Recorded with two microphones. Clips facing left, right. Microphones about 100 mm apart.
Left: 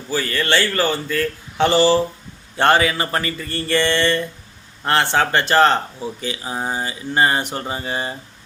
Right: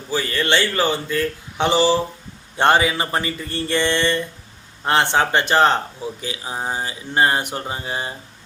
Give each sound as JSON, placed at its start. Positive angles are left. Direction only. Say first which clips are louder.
{"t": 0.1, "sound": "speech", "louder": "even", "side_deg": -20}
{"t": 6.2, "sound": "speech", "louder": "left 2 dB", "side_deg": 0}